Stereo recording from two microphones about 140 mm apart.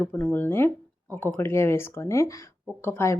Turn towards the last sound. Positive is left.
turn(degrees=20)  # may be behind; listen again after turning